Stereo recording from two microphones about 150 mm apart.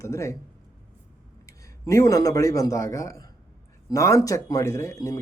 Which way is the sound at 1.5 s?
20° left (ahead or behind).